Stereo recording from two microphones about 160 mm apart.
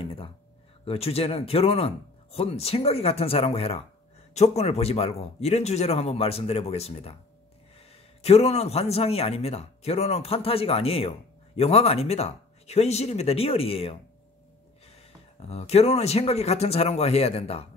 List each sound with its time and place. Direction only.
0.0 s a sound: 35° left (ahead or behind)
0.8 s speech: 40° left (ahead or behind)
8.2 s speech: 40° left (ahead or behind)
15.4 s speech: 40° left (ahead or behind)